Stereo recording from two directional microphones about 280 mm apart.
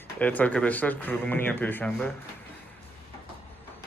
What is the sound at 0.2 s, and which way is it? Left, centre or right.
Speech, centre.